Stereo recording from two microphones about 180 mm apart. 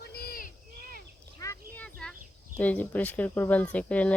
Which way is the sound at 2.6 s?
10° left (ahead or behind).